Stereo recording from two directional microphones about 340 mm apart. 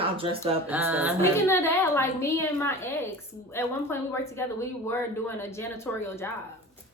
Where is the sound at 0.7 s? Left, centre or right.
Centre.